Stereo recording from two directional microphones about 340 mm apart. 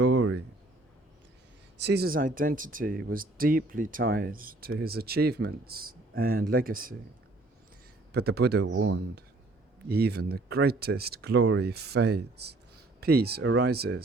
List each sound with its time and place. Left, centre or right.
0.0 s a sound: right
1.8 s speech: right
8.1 s speech: right